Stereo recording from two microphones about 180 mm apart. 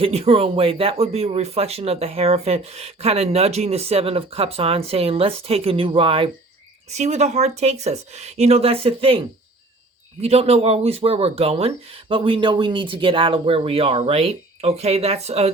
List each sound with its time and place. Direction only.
0.0 s speech: 35° right (ahead or behind)